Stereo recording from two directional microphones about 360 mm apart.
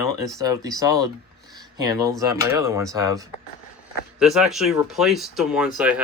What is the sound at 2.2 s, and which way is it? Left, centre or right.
Speech, centre.